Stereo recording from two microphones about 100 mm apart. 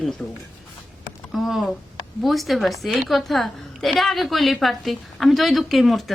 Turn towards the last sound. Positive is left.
turn(degrees=0)  # may be behind; listen again after turning